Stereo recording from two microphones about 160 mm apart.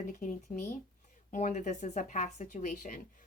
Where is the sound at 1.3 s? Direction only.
55° left (ahead or behind).